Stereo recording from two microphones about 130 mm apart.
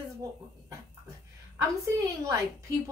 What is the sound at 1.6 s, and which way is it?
Speech, 25° right (ahead or behind).